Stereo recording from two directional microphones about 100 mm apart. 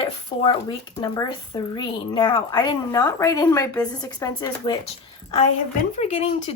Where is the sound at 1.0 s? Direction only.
40° left (ahead or behind).